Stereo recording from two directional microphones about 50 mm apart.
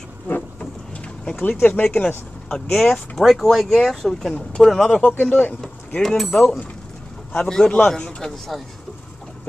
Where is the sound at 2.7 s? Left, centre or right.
Centre.